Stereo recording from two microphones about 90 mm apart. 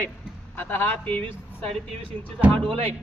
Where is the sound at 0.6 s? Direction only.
25° left (ahead or behind).